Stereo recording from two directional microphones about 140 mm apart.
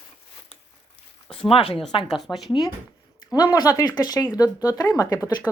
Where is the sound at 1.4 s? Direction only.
40° left (ahead or behind).